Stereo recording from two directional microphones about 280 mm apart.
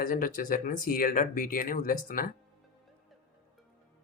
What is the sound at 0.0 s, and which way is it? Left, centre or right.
Speech, left.